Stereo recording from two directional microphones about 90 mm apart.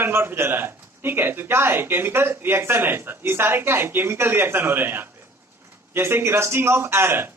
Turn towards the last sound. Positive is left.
turn(degrees=-25)  # may be behind; listen again after turning